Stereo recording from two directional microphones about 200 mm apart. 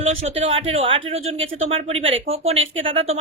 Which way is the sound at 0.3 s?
30° right (ahead or behind).